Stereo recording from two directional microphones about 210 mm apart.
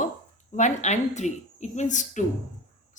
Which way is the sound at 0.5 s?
35° left (ahead or behind).